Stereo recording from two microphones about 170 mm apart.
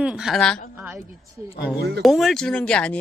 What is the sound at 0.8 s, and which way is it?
Speech, 15° right (ahead or behind).